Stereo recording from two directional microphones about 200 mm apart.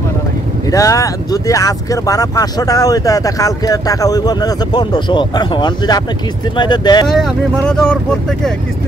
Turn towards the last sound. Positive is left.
turn(degrees=5)  # may be behind; listen again after turning